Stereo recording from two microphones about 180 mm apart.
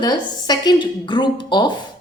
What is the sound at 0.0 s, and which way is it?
A woman's voice, 25° left (ahead or behind).